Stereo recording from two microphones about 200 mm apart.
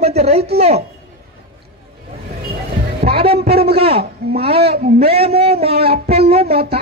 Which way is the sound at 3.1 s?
30° right (ahead or behind).